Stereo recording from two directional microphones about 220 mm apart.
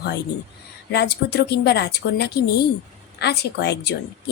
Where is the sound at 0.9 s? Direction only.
50° left (ahead or behind).